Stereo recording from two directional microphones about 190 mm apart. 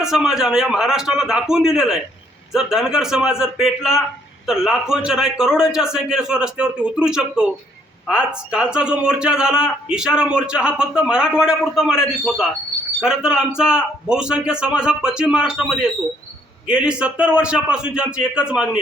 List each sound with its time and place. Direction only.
0.0 s a man's voice: 5° right (ahead or behind)